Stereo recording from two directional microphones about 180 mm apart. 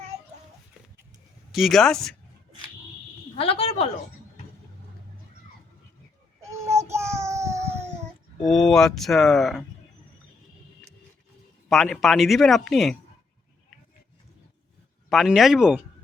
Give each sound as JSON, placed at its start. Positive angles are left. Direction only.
{"t": 1.5, "sound": "speech", "side_deg": 0}
{"t": 3.3, "sound": "a sound", "side_deg": 35}
{"t": 6.4, "sound": "child singing", "side_deg": -15}
{"t": 8.4, "sound": "speech", "side_deg": 0}
{"t": 11.7, "sound": "speech", "side_deg": 0}
{"t": 15.1, "sound": "speech", "side_deg": 0}